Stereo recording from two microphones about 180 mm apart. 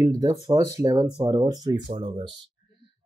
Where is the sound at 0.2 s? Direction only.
20° right (ahead or behind).